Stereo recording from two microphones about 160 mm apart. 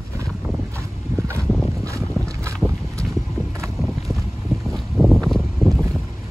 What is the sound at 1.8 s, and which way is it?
Boat, 20° right (ahead or behind).